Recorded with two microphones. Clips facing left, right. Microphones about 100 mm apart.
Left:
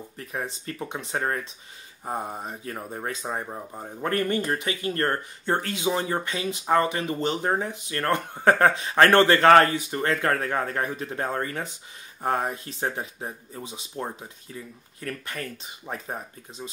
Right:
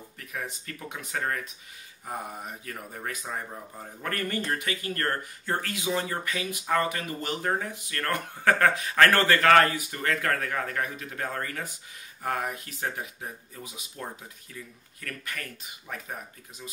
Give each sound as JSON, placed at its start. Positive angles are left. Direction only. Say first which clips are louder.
{"t": 0.2, "sound": "speech", "louder": "left 4 dB", "side_deg": 30}